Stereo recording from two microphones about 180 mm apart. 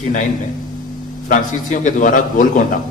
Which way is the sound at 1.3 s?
45° left (ahead or behind).